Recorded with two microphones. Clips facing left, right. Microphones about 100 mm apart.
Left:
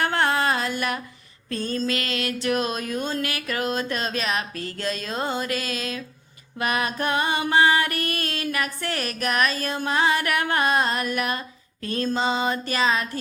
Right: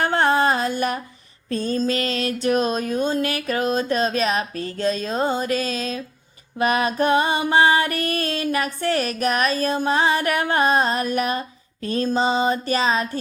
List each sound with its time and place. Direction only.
0.0 s a sound: 20° right (ahead or behind)
1.5 s music: 20° right (ahead or behind)
1.9 s music: 30° right (ahead or behind)